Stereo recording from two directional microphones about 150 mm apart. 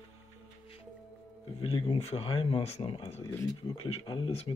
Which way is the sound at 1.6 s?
35° left (ahead or behind).